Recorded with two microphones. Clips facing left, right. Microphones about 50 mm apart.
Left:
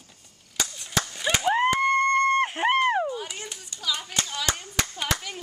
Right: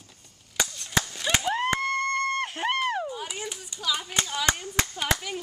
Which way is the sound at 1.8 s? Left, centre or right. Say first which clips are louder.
Left 6 dB; left.